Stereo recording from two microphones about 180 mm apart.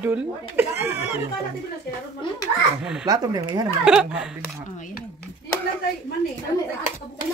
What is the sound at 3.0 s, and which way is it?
Speech, 20° right (ahead or behind).